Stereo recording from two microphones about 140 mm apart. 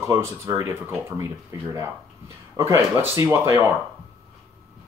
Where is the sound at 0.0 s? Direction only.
20° right (ahead or behind).